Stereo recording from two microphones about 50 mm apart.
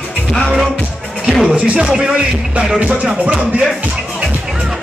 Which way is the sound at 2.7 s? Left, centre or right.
Right.